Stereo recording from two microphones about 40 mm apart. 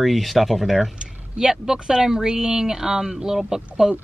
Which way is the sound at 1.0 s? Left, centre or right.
Centre.